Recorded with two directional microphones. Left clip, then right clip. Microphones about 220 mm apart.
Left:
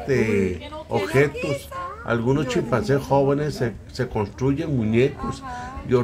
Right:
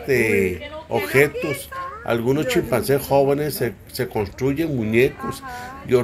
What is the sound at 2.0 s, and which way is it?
Speech, 5° left (ahead or behind).